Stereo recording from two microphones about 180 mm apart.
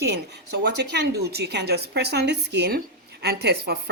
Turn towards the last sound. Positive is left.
turn(degrees=-65)  # may be behind; listen again after turning